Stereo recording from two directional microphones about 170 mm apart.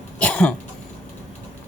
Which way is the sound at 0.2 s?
5° left (ahead or behind).